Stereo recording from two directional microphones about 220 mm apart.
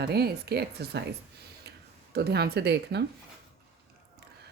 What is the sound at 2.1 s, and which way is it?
Speech, 45° right (ahead or behind).